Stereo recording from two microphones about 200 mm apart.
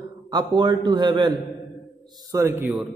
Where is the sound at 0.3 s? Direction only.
20° right (ahead or behind).